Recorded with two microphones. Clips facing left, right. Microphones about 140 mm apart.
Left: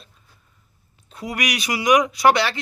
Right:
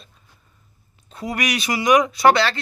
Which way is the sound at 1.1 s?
10° left (ahead or behind).